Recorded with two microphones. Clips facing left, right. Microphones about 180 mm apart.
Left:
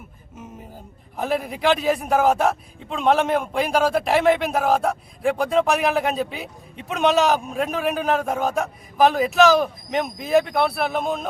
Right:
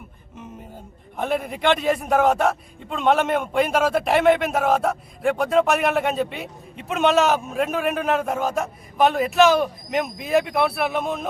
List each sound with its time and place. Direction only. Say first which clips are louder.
1.1 s a man's voice: even; centre (ahead or behind)